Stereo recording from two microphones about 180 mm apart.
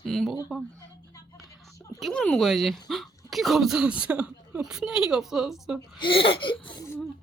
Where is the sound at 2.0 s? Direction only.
5° left (ahead or behind).